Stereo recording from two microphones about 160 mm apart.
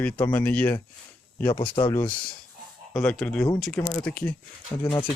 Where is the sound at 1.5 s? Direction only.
30° left (ahead or behind).